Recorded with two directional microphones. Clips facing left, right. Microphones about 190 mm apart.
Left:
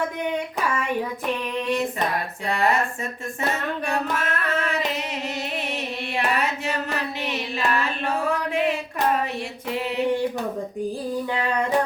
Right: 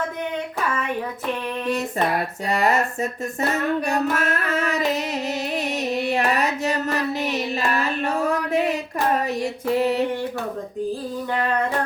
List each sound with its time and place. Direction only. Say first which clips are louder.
2.5 s music: right 1 dB; 40° right (ahead or behind)
6.1 s a sound: right 1 dB; 40° right (ahead or behind)
7.2 s music: right 3 dB; 40° right (ahead or behind)
9.4 s music: right 7 dB; 40° right (ahead or behind)